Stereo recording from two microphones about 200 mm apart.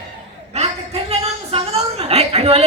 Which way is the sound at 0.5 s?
30° right (ahead or behind).